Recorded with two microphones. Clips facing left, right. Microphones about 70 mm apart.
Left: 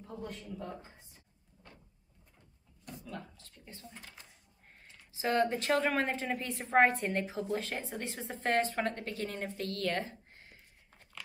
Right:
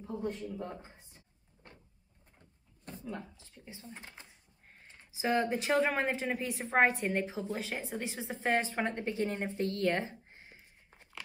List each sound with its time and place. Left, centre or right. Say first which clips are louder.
0.0 s speech: right 6 dB; right
2.8 s a sound: right 3 dB; right
3.2 s speech: right 1 dB; centre
3.8 s speech: right 3 dB; right
5.1 s a woman's voice: even; centre